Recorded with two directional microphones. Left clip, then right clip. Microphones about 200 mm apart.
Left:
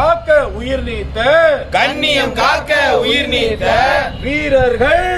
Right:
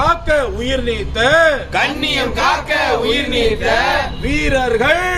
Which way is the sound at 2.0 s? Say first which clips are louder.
Left 3 dB; 55° left (ahead or behind).